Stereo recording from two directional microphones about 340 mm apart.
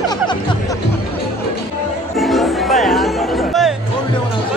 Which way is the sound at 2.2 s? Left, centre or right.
Centre.